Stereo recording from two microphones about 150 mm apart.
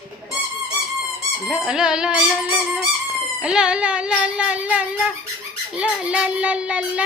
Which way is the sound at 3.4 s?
5° right (ahead or behind).